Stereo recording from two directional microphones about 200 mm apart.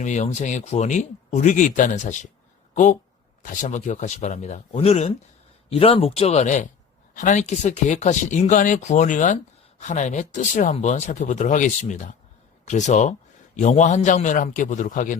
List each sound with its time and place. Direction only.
0.0 s speech: 35° left (ahead or behind)
3.4 s speech: 40° left (ahead or behind)